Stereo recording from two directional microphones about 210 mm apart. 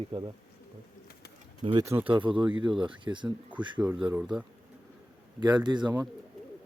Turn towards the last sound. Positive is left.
turn(degrees=-20)  # may be behind; listen again after turning